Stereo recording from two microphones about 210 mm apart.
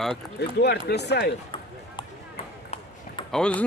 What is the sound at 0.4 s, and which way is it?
Speech, 50° left (ahead or behind).